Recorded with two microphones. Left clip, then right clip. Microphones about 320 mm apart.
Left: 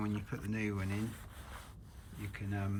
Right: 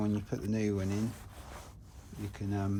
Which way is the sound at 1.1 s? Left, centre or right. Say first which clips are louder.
Right 2 dB; right.